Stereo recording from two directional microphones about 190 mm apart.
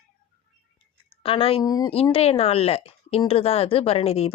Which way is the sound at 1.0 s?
30° left (ahead or behind).